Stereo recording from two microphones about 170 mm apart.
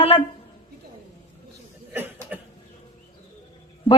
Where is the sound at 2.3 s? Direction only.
10° right (ahead or behind).